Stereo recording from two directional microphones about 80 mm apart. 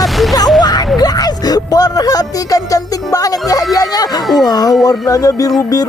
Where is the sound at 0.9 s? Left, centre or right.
Left.